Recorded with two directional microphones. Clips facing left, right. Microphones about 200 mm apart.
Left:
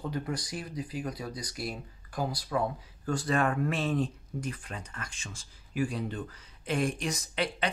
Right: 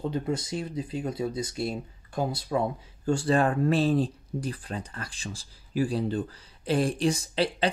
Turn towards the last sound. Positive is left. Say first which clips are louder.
# right 5 dB
turn(degrees=-30)  # may be behind; listen again after turning